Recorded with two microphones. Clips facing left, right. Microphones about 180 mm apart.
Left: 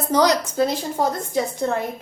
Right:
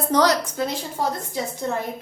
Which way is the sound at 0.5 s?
40° left (ahead or behind).